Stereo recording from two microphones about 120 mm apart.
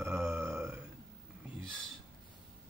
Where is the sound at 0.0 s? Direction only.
20° right (ahead or behind).